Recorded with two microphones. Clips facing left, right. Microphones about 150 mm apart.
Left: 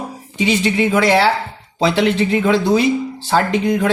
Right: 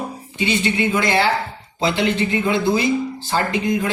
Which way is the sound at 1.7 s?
75° left (ahead or behind).